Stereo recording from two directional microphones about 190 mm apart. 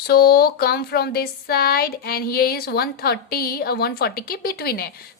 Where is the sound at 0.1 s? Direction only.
55° left (ahead or behind).